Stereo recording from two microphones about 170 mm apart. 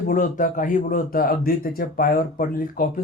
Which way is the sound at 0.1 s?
50° left (ahead or behind).